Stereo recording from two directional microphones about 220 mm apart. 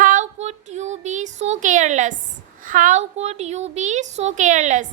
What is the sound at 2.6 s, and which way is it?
A woman's voice, 35° right (ahead or behind).